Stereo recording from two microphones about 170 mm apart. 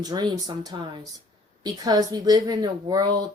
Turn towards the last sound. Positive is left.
turn(degrees=-25)  # may be behind; listen again after turning